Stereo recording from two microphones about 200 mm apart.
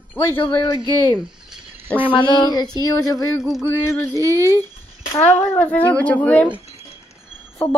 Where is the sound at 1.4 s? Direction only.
5° right (ahead or behind).